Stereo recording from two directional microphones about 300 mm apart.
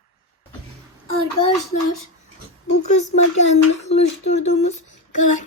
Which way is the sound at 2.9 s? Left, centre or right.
Left.